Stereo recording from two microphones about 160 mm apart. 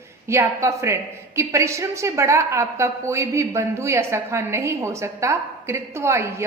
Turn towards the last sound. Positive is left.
turn(degrees=-15)  # may be behind; listen again after turning